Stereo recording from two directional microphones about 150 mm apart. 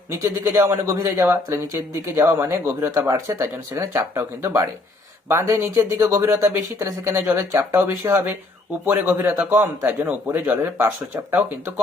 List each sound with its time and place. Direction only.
0.1 s speech: 20° right (ahead or behind)